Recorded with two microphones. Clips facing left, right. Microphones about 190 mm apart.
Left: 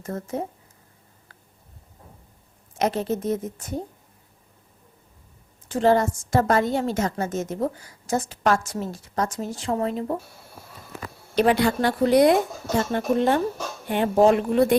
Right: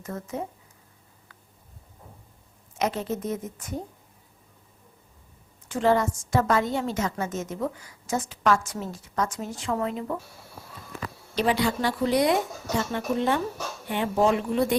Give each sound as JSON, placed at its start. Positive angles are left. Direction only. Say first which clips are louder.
{"t": 0.0, "sound": "a woman's voice", "louder": "left 4 dB", "side_deg": 40}
{"t": 2.7, "sound": "a woman's voice", "louder": "left 4 dB", "side_deg": 35}
{"t": 5.6, "sound": "a woman's voice", "louder": "left 3 dB", "side_deg": 35}
{"t": 11.3, "sound": "speech", "louder": "left 5 dB", "side_deg": 55}
{"t": 14.3, "sound": "speech", "louder": "left 5 dB", "side_deg": 55}